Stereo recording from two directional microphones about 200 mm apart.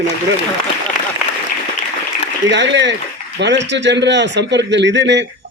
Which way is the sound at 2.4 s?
60° right (ahead or behind).